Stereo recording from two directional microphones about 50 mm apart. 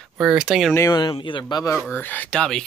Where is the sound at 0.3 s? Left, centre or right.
Centre.